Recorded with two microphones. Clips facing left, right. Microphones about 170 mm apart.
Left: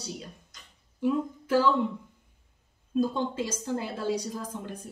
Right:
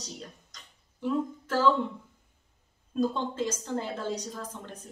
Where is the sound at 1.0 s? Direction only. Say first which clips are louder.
Left 2 dB; 10° left (ahead or behind).